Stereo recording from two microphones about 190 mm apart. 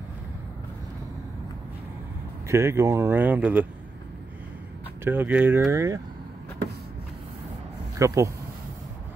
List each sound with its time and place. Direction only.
2.4 s speech: 15° right (ahead or behind)
5.0 s speech: 10° right (ahead or behind)
8.0 s speech: 15° right (ahead or behind)